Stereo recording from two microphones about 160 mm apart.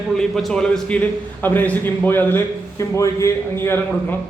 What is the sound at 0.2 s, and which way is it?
A man's voice, 5° left (ahead or behind).